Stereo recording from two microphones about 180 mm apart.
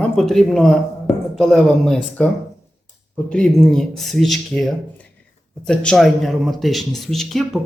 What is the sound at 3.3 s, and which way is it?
Speech, 5° left (ahead or behind).